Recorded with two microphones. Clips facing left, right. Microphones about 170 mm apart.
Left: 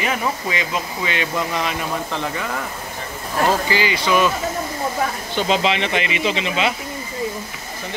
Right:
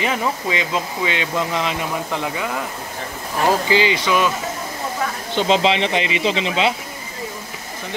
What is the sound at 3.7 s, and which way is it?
Speech, 20° right (ahead or behind).